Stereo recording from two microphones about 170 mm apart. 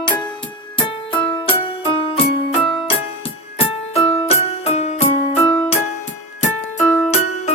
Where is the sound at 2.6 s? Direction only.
30° left (ahead or behind).